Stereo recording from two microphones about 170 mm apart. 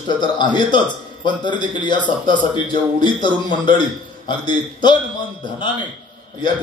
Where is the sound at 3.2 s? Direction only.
25° left (ahead or behind).